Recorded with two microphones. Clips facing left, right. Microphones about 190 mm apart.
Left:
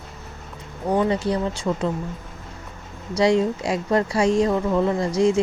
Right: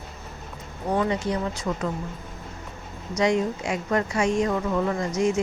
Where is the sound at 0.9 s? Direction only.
30° left (ahead or behind).